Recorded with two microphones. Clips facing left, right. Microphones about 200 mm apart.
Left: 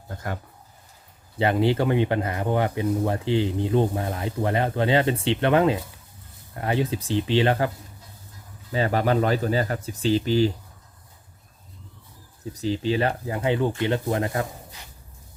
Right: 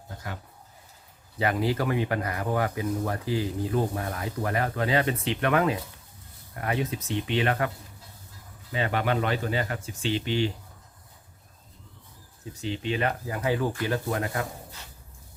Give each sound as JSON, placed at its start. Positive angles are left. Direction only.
{"t": 1.4, "sound": "speech", "side_deg": 25}
{"t": 8.7, "sound": "speech", "side_deg": 35}
{"t": 12.5, "sound": "speech", "side_deg": 35}